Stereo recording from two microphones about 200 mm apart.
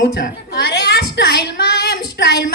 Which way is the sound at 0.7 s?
55° left (ahead or behind).